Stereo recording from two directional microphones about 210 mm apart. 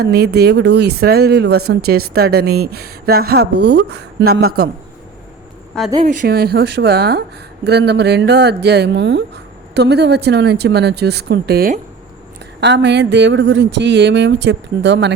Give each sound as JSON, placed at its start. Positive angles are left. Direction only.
{"t": 0.0, "sound": "speech", "side_deg": -50}
{"t": 5.7, "sound": "speech", "side_deg": 5}
{"t": 6.2, "sound": "speech", "side_deg": -50}
{"t": 12.5, "sound": "a sound", "side_deg": -55}